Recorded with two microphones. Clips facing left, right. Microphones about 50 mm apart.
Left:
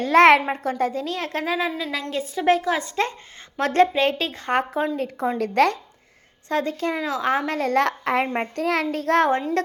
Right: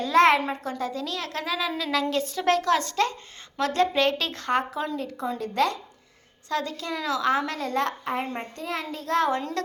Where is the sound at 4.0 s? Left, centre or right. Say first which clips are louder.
Left 2 dB; left.